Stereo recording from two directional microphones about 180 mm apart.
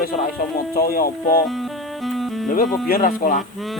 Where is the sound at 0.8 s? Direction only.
55° left (ahead or behind).